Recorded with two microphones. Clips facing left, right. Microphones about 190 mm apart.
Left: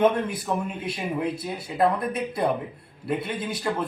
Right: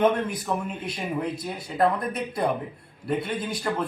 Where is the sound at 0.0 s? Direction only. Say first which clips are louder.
Left 1 dB; 5° left (ahead or behind).